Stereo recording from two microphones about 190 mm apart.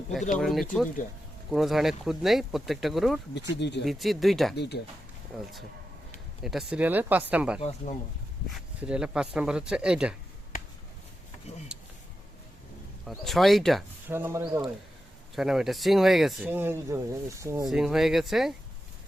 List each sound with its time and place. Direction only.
0.3 s speech: centre (ahead or behind)
3.5 s speech: 65° left (ahead or behind)
3.8 s speech: centre (ahead or behind)
4.5 s speech: 60° left (ahead or behind)
5.3 s speech: centre (ahead or behind)
13.1 s speech: centre (ahead or behind)
14.1 s speech: 15° right (ahead or behind)
15.4 s speech: centre (ahead or behind)
17.7 s speech: centre (ahead or behind)